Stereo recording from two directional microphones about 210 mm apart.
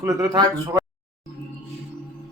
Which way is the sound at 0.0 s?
15° right (ahead or behind).